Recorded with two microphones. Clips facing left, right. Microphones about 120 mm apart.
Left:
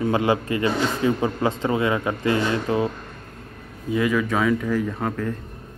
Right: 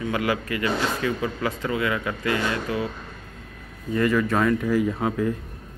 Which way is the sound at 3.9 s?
5° left (ahead or behind).